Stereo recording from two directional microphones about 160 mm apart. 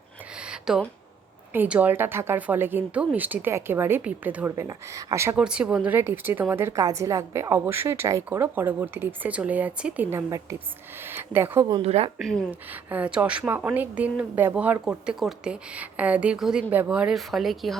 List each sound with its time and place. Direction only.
0.3 s a sound: 5° right (ahead or behind)
1.5 s a woman's voice: 10° right (ahead or behind)
5.4 s a woman's voice: 5° right (ahead or behind)
11.8 s a woman's voice: 40° right (ahead or behind)
12.2 s speech: 5° left (ahead or behind)
12.7 s a woman's voice: 10° right (ahead or behind)